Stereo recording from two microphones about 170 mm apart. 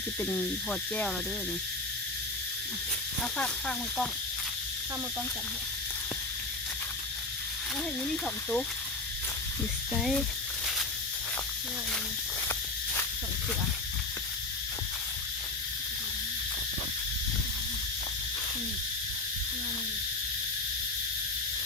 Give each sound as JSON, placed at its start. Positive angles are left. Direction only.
{"t": 0.2, "sound": "speech", "side_deg": 10}
{"t": 3.3, "sound": "speech", "side_deg": 5}
{"t": 8.1, "sound": "speech", "side_deg": 5}
{"t": 9.9, "sound": "speech", "side_deg": 0}